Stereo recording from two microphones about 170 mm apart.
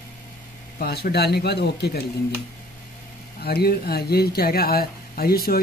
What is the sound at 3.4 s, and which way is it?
Speech, 70° left (ahead or behind).